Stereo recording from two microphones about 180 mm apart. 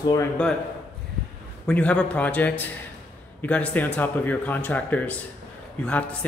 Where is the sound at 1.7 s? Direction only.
5° left (ahead or behind).